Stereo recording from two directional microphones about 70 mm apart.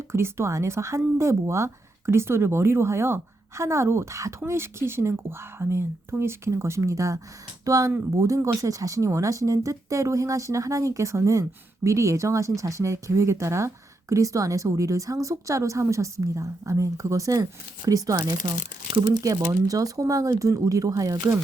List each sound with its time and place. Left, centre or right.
0.1 s speech: right